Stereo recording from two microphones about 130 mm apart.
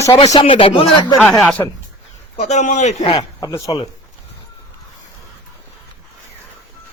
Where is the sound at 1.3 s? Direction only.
10° left (ahead or behind).